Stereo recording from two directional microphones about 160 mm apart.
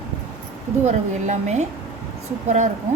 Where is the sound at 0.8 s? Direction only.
45° right (ahead or behind).